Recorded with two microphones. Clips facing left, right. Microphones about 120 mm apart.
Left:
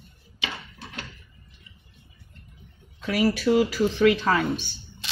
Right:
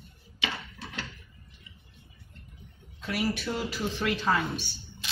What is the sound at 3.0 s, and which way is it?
Speech, 90° left.